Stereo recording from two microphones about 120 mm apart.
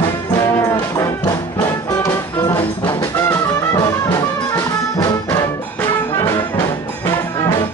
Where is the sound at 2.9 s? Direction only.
20° left (ahead or behind).